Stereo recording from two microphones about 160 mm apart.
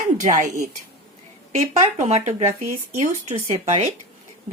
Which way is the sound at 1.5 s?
45° right (ahead or behind).